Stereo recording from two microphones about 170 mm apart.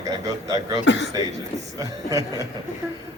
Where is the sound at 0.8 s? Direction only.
90° left.